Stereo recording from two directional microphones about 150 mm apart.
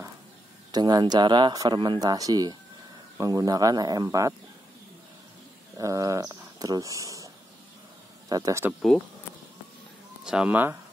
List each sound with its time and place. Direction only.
0.7 s speech: 25° right (ahead or behind)
5.8 s speech: 20° right (ahead or behind)
8.3 s speech: 25° right (ahead or behind)
10.2 s speech: 5° right (ahead or behind)